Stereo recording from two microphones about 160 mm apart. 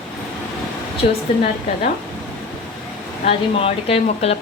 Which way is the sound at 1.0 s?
40° left (ahead or behind).